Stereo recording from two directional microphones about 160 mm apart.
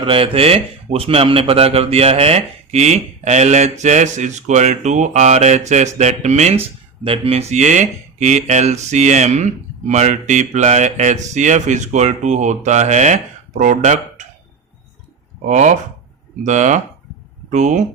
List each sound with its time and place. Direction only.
0.0 s speech: 35° right (ahead or behind)
15.4 s speech: 50° right (ahead or behind)